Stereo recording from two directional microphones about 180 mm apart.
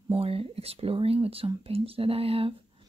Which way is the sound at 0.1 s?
30° right (ahead or behind).